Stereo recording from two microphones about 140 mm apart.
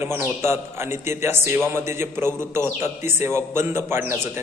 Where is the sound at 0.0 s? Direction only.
15° right (ahead or behind).